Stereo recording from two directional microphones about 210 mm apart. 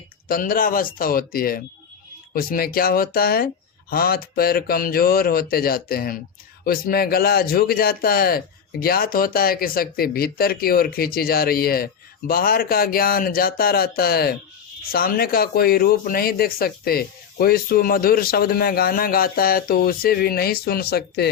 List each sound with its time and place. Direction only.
0.3 s speech: 40° left (ahead or behind)